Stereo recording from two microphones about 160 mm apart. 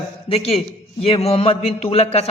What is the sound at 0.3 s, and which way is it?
A man's voice, 40° left (ahead or behind).